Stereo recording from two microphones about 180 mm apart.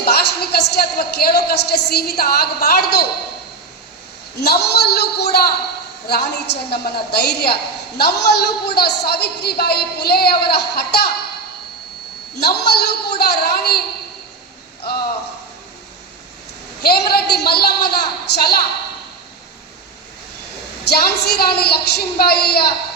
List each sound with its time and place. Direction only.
0.0 s a woman's voice: 60° left (ahead or behind)
4.4 s a woman's voice: 65° left (ahead or behind)
12.4 s a woman's voice: 65° left (ahead or behind)
14.8 s a woman's voice: 60° left (ahead or behind)
16.8 s a woman's voice: 60° left (ahead or behind)
20.8 s a woman's voice: 65° left (ahead or behind)